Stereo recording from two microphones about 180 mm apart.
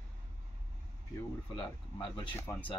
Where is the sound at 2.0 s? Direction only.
25° left (ahead or behind).